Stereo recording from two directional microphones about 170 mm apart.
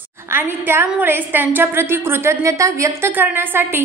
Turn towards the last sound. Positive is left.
turn(degrees=-10)  # may be behind; listen again after turning